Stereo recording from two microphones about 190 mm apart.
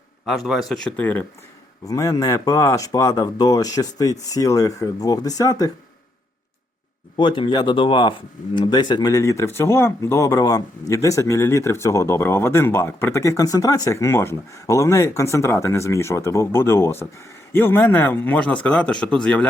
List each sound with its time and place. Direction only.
0.3 s speech: centre (ahead or behind); by 5.7 s 20° left (ahead or behind)
7.2 s speech: 25° left (ahead or behind); by 19.5 s 5° left (ahead or behind)